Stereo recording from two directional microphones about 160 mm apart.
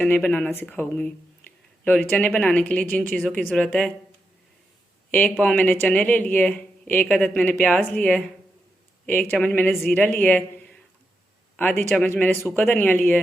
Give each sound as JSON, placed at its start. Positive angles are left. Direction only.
{"t": 0.0, "sound": "speech", "side_deg": 10}
{"t": 5.1, "sound": "speech", "side_deg": 5}
{"t": 9.3, "sound": "speech", "side_deg": 10}